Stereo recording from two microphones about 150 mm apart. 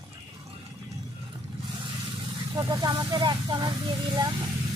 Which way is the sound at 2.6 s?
25° right (ahead or behind).